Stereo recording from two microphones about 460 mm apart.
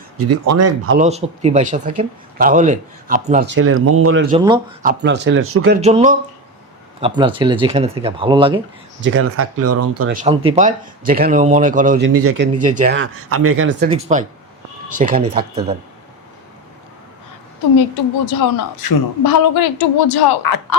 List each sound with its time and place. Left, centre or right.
0.2 s speech: right
0.9 s speech: centre
4.3 s speech: centre; by 5.8 s right
5.8 s speech: centre
9.0 s speech: right
10.1 s speech: centre
18.3 s a man's voice: left